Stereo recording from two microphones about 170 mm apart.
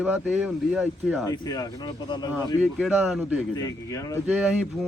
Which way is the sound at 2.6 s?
5° right (ahead or behind).